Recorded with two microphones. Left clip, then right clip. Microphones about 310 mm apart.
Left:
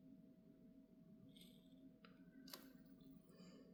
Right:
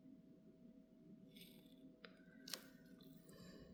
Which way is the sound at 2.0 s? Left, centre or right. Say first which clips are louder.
Right 3 dB; right.